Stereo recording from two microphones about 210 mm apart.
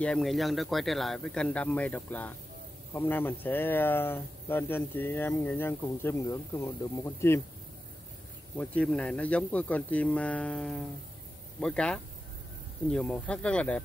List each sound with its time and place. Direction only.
0.0 s speech: 5° left (ahead or behind)
8.5 s speech: 5° left (ahead or behind)